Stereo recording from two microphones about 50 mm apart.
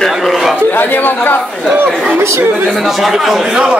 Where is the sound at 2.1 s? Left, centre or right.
Right.